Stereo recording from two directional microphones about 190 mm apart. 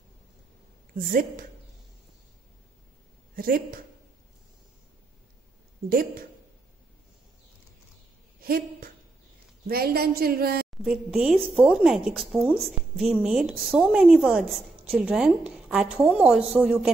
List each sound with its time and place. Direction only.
0.9 s a woman's voice: 45° right (ahead or behind)
3.3 s a woman's voice: 50° right (ahead or behind)
5.9 s a woman's voice: 50° right (ahead or behind)
8.4 s a sound: 50° right (ahead or behind)
9.7 s a woman's voice: 55° right (ahead or behind)
10.8 s speech: 5° right (ahead or behind)